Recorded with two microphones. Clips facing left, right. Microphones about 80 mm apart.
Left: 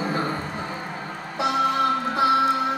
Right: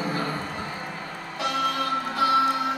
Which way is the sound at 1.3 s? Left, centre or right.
Left.